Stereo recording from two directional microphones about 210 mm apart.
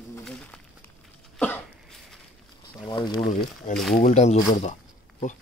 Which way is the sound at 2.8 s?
20° left (ahead or behind).